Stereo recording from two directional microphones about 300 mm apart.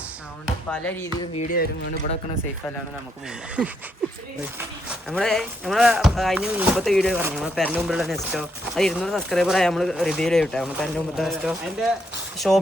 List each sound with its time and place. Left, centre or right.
0.7 s speech: centre
1.4 s speech: left
3.6 s speech: centre
5.0 s speech: centre